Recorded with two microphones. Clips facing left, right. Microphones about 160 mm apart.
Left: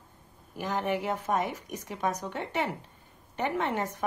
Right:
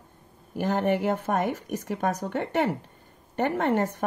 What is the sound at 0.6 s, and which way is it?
Speech, 50° right (ahead or behind).